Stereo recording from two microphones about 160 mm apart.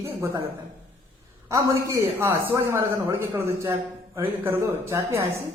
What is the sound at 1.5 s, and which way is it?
Speech, 20° right (ahead or behind).